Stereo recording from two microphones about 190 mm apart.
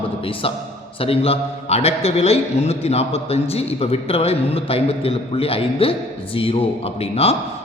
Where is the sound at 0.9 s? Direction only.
30° left (ahead or behind).